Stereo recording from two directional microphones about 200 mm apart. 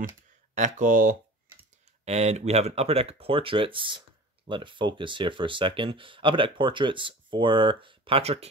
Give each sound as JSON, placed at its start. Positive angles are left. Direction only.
{"t": 0.6, "sound": "speech", "side_deg": -40}